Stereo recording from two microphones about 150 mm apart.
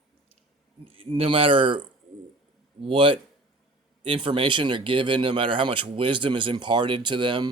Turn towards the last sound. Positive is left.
turn(degrees=-30)  # may be behind; listen again after turning